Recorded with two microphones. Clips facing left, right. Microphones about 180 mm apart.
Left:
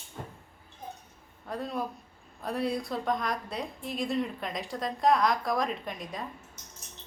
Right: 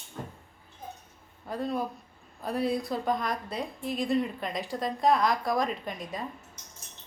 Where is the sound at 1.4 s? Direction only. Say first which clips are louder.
Right 3 dB; centre (ahead or behind).